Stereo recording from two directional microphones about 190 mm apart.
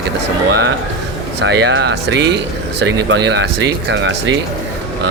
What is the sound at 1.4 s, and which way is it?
Speech, 65° right (ahead or behind).